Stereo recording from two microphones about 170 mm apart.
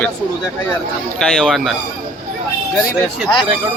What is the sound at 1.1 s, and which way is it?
Speech, centre (ahead or behind).